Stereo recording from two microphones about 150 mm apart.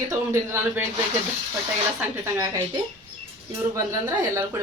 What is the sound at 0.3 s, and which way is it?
Speech, 15° right (ahead or behind).